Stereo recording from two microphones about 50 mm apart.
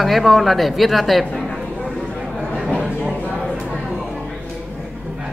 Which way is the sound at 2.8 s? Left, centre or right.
Right.